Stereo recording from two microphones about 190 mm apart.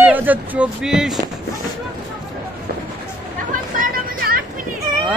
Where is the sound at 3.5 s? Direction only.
45° right (ahead or behind).